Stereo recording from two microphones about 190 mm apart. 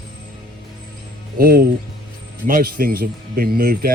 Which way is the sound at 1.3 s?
50° right (ahead or behind).